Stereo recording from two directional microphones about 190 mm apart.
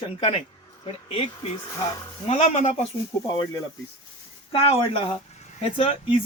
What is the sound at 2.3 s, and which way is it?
Speech, 40° left (ahead or behind).